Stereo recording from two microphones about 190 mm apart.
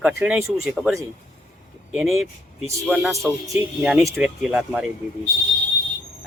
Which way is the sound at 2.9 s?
Centre (ahead or behind).